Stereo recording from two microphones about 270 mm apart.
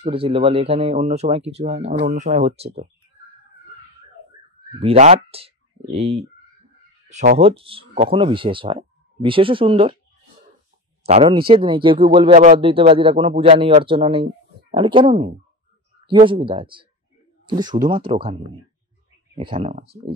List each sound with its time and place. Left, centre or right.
0.0 s speech: centre
4.7 s speech: right
11.1 s speech: right